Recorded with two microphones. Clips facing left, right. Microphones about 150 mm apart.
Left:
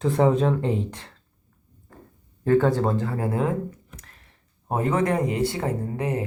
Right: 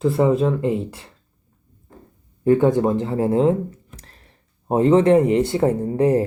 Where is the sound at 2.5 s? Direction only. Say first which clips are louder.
Right 4 dB; 15° right (ahead or behind).